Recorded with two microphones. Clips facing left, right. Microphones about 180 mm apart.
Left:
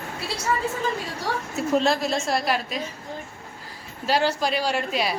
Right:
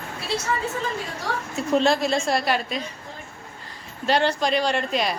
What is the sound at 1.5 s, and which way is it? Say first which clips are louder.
A woman's voice: right 2 dB; centre (ahead or behind).